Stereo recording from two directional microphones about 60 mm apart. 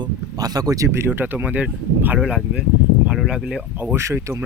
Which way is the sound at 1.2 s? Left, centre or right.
Right.